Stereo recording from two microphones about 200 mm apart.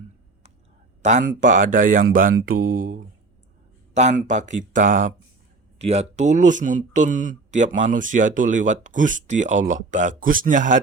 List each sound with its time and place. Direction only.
1.0 s a man's voice: 40° right (ahead or behind)